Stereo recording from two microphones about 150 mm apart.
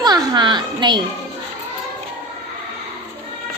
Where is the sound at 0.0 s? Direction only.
30° right (ahead or behind).